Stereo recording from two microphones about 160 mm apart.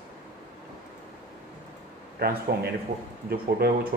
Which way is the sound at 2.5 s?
85° right.